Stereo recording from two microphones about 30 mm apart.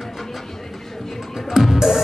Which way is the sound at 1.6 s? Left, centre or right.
Centre.